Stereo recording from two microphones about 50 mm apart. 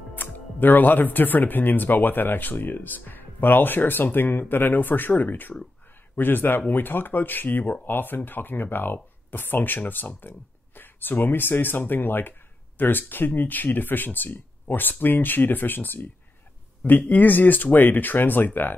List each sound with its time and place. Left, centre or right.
0.1 s a man's voice: left